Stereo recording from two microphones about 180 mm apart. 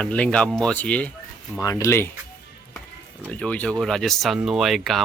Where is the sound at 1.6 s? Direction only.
20° left (ahead or behind).